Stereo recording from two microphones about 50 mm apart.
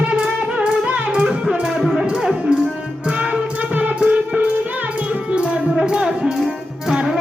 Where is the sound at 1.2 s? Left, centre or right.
Centre.